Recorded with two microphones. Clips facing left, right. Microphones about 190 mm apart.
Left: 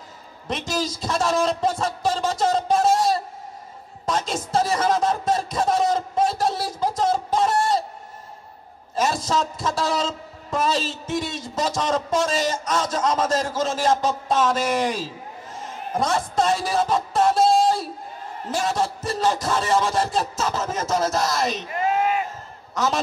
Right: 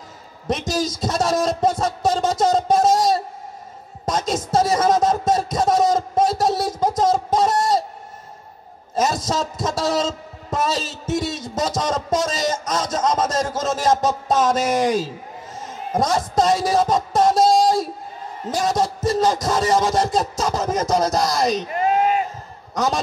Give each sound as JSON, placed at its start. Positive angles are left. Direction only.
{"t": 0.5, "sound": "a man's voice", "side_deg": -40}
{"t": 4.0, "sound": "a sound", "side_deg": -40}
{"t": 8.9, "sound": "a man's voice", "side_deg": -40}
{"t": 16.9, "sound": "music", "side_deg": -40}
{"t": 18.5, "sound": "a man's voice", "side_deg": -40}
{"t": 20.0, "sound": "music", "side_deg": -15}
{"t": 20.3, "sound": "speech", "side_deg": -40}